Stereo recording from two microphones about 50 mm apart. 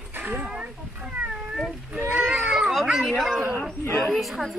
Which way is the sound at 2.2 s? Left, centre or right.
Right.